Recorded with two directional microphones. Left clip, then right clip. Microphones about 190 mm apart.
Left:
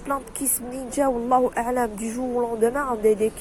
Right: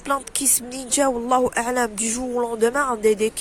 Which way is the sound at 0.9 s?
65° right (ahead or behind).